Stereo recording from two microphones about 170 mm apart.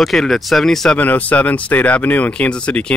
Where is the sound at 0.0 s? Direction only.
Centre (ahead or behind).